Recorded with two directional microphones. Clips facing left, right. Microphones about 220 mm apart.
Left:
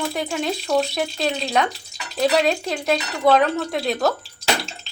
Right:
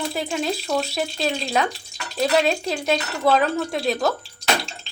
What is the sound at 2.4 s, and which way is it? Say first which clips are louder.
Speech: left 1 dB; 30° right (ahead or behind).